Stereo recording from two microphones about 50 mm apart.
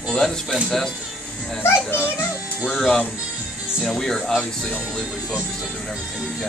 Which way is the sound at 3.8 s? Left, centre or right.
Centre.